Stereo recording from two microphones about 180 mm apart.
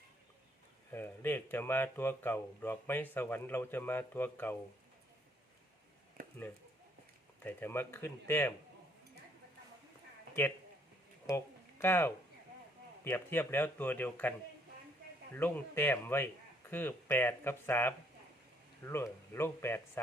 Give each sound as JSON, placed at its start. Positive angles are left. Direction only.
{"t": 0.9, "sound": "speech", "side_deg": 10}
{"t": 6.2, "sound": "a sound", "side_deg": -50}
{"t": 7.4, "sound": "speech", "side_deg": 10}
{"t": 11.3, "sound": "speech", "side_deg": 15}
{"t": 15.4, "sound": "speech", "side_deg": 10}